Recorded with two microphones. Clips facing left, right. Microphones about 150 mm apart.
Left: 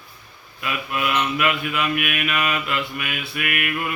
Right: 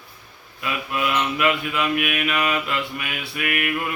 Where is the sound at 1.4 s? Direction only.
25° right (ahead or behind).